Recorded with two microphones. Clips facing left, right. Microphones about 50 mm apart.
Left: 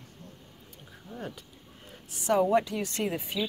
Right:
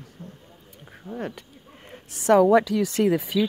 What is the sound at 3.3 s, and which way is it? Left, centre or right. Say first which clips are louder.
Speech: right 8 dB; right.